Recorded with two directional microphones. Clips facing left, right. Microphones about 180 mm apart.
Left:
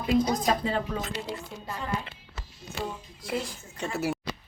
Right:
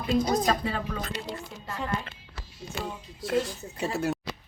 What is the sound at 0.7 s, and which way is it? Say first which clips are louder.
Speech: left 3 dB; 25° left (ahead or behind).